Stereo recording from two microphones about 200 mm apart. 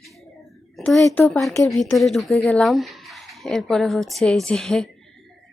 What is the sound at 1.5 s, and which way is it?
Speech, 15° left (ahead or behind).